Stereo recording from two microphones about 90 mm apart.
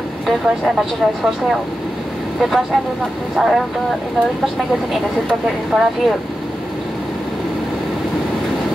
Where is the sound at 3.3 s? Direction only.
Centre (ahead or behind).